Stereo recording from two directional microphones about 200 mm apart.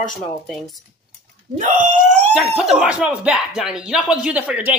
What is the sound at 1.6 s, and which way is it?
Speech, 40° right (ahead or behind).